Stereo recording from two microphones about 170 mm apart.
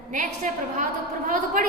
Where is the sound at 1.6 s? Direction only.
50° right (ahead or behind).